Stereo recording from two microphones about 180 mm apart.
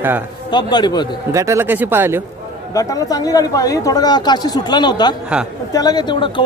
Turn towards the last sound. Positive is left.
turn(degrees=25)  # may be behind; listen again after turning